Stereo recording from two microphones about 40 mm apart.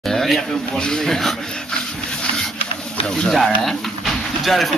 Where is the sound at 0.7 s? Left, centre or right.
Centre.